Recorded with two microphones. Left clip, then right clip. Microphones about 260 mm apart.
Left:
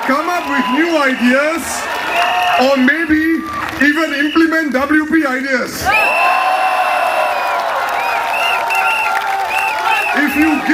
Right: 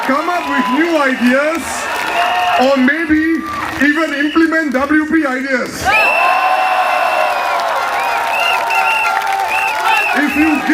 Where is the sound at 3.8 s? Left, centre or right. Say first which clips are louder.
Even; centre.